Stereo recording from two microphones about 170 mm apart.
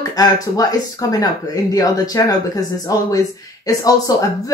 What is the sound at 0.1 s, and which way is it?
Speech, 20° left (ahead or behind).